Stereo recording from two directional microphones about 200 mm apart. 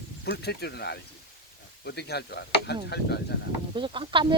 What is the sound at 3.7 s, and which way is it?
Speech, 25° right (ahead or behind).